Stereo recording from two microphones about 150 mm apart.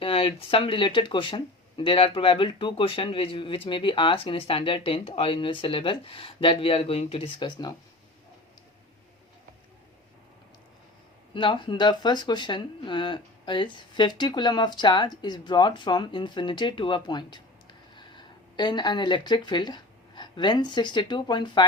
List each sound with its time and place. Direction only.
0.0 s speech: 35° left (ahead or behind)
11.3 s speech: 35° left (ahead or behind)